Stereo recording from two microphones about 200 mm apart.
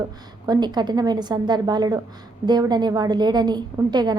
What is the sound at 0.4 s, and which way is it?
A woman's voice, 20° right (ahead or behind).